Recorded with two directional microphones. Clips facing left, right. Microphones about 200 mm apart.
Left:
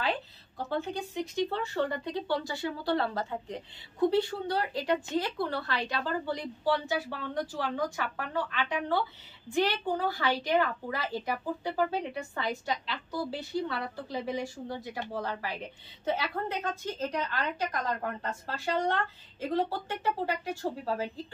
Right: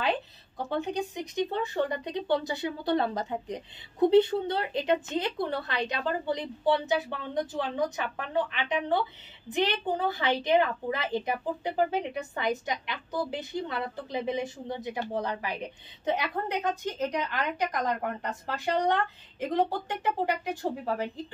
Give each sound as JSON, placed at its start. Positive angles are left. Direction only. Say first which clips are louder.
{"t": 0.6, "sound": "a woman's voice", "louder": "right 3 dB", "side_deg": -15}